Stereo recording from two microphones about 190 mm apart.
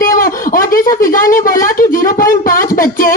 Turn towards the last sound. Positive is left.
turn(degrees=45)  # may be behind; listen again after turning